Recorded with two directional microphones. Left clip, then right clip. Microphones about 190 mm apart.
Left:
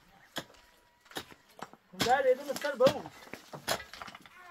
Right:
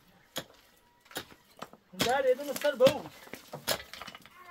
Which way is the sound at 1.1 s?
60° right (ahead or behind).